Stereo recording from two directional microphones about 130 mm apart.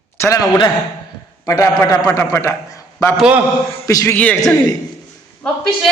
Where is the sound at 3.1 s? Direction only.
5° right (ahead or behind).